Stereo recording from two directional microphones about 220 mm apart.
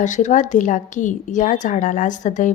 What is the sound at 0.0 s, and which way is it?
A woman's voice, 35° left (ahead or behind).